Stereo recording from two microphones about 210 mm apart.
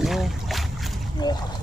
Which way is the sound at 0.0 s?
Centre (ahead or behind).